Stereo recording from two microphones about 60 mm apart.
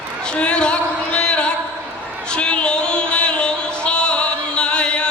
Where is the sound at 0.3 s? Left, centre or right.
Centre.